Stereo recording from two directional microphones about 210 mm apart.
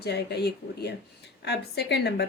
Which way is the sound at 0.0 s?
50° left (ahead or behind).